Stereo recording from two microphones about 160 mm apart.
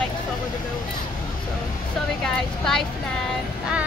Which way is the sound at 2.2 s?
5° left (ahead or behind).